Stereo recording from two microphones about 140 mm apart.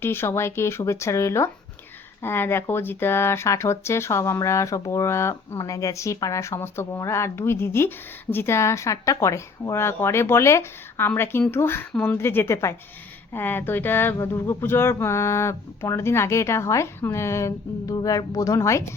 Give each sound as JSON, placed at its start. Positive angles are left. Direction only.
{"t": 0.0, "sound": "speech", "side_deg": 15}